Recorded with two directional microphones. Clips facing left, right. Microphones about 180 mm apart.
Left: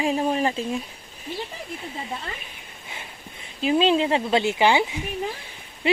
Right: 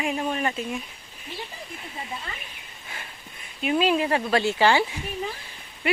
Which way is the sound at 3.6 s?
25° left (ahead or behind).